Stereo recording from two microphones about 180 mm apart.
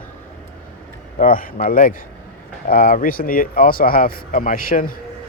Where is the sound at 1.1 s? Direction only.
50° left (ahead or behind).